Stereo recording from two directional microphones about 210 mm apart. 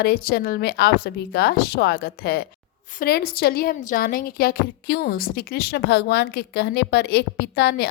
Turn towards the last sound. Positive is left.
turn(degrees=50)  # may be behind; listen again after turning